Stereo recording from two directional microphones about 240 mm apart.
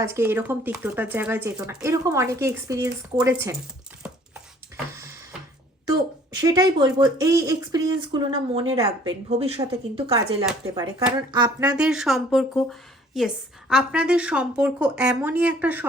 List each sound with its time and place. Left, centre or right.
0.0 s a woman's voice: centre
4.0 s a sound: centre
5.8 s a woman's voice: centre
11.6 s a woman's voice: centre